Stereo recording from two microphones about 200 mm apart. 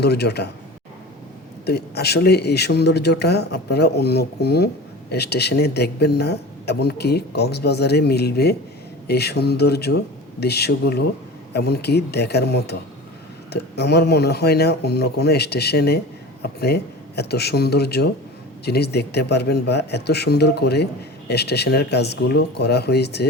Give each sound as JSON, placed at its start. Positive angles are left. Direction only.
{"t": 0.0, "sound": "speech", "side_deg": 55}
{"t": 1.6, "sound": "speech", "side_deg": 55}